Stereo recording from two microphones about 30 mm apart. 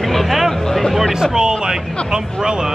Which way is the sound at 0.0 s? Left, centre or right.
Centre.